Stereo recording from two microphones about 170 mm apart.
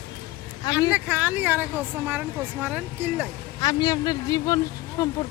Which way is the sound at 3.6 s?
20° left (ahead or behind).